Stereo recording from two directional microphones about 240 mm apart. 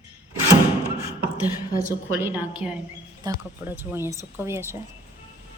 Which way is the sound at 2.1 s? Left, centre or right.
Centre.